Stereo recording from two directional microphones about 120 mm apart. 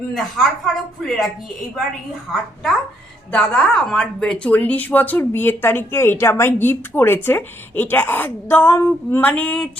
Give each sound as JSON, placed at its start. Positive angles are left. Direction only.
{"t": 0.1, "sound": "a woman's voice", "side_deg": 0}
{"t": 2.3, "sound": "a woman's voice", "side_deg": 0}